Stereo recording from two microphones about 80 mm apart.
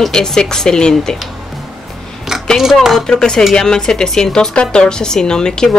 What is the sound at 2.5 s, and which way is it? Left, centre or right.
A woman's voice, centre.